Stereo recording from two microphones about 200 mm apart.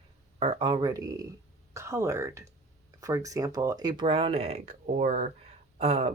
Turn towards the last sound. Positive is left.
turn(degrees=-30)  # may be behind; listen again after turning